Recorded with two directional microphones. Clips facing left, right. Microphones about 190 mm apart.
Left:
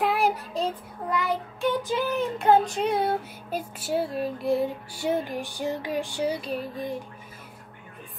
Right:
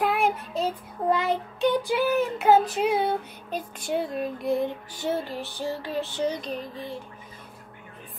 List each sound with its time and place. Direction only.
0.0 s child singing: centre (ahead or behind)
1.1 s child singing: 25° right (ahead or behind)
1.8 s child singing: 10° right (ahead or behind); by 7.0 s 10° left (ahead or behind)